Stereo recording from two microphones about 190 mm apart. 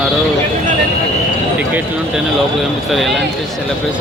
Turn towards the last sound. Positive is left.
turn(degrees=0)  # may be behind; listen again after turning